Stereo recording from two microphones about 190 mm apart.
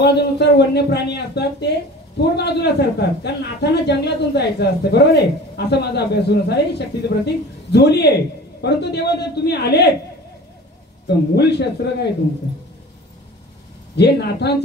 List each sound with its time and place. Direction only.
0.0 s a woman's voice: 60° left (ahead or behind)
11.1 s a woman's voice: 60° left (ahead or behind)
13.9 s a woman's voice: 60° left (ahead or behind)